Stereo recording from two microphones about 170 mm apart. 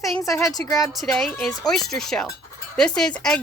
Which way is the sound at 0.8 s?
Centre (ahead or behind).